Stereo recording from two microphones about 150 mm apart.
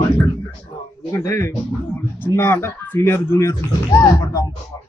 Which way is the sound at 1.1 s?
20° left (ahead or behind).